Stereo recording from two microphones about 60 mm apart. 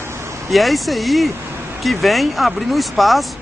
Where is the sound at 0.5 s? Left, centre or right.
Centre.